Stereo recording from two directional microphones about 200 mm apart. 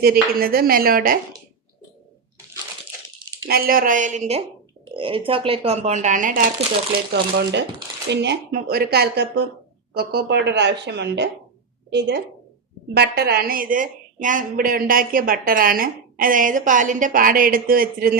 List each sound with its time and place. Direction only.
0.0 s a woman's voice: 50° right (ahead or behind)
3.4 s speech: 45° right (ahead or behind)
8.1 s a woman's voice: 60° right (ahead or behind)